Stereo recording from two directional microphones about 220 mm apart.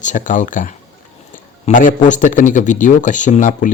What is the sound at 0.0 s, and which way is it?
Speech, 35° left (ahead or behind).